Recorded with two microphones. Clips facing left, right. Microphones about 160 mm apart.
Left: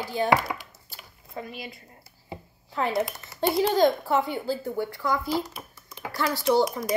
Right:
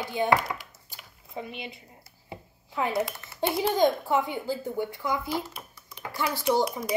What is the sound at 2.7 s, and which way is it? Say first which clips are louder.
Speech: left 1 dB; 15° right (ahead or behind).